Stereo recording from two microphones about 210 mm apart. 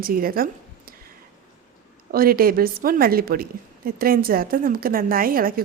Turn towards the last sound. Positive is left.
turn(degrees=-45)  # may be behind; listen again after turning